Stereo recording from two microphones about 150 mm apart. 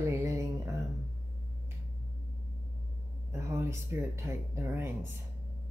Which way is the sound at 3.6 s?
20° right (ahead or behind).